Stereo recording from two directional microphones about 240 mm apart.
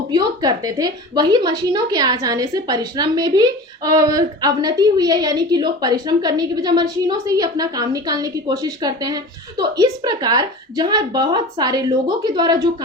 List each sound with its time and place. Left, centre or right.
0.1 s a woman's voice: centre